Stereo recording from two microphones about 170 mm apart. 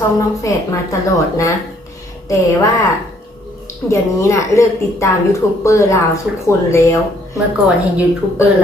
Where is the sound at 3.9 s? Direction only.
15° left (ahead or behind).